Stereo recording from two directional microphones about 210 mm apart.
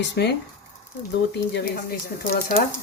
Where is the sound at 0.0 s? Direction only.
55° left (ahead or behind).